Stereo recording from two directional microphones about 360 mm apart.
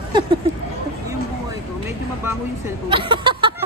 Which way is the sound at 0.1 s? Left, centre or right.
Centre.